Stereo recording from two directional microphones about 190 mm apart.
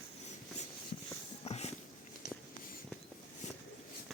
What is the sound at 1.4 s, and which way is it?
Dog, 35° left (ahead or behind).